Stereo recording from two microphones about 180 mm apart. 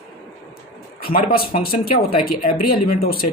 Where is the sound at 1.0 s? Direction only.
55° left (ahead or behind).